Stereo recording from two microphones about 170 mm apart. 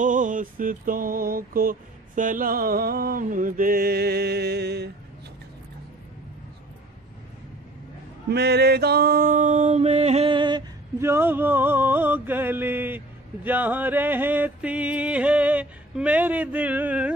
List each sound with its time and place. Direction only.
0.0 s mantra: 50° right (ahead or behind); by 4.9 s 75° right (ahead or behind)
8.3 s male singing: 75° right (ahead or behind); by 10.6 s 30° right (ahead or behind)
11.0 s mantra: 15° right (ahead or behind)